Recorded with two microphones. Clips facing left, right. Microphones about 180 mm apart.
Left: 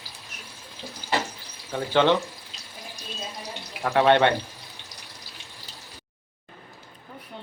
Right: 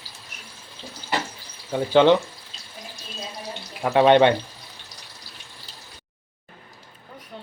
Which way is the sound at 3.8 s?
20° right (ahead or behind).